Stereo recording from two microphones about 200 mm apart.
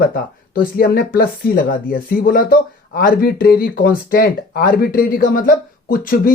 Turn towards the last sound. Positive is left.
turn(degrees=45)  # may be behind; listen again after turning